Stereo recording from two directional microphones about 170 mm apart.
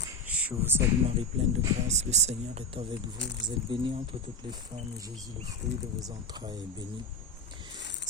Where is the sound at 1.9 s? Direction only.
40° right (ahead or behind); by 6.8 s 25° right (ahead or behind).